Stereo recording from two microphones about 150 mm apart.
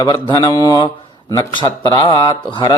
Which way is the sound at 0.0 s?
25° left (ahead or behind).